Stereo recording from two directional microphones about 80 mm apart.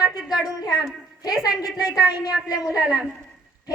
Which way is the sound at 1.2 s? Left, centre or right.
Left.